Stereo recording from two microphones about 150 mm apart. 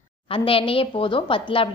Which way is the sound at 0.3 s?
40° left (ahead or behind).